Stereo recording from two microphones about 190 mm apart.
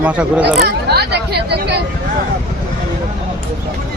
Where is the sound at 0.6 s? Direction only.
60° right (ahead or behind).